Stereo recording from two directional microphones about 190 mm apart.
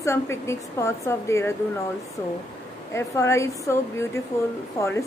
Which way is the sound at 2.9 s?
15° left (ahead or behind).